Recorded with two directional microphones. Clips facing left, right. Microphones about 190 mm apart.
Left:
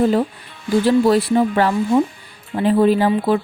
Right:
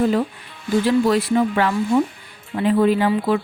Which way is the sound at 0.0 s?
35° left (ahead or behind).